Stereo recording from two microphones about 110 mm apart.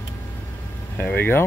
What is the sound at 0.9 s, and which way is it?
Speech, 20° left (ahead or behind).